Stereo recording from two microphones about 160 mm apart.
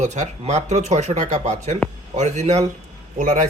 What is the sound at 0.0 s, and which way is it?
Speech, 45° right (ahead or behind).